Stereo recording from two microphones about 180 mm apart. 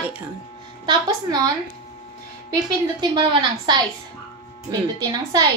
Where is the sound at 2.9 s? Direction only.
25° right (ahead or behind).